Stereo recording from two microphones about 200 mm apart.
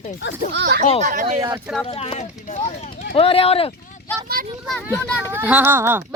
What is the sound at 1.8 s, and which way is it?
Speech, 30° left (ahead or behind).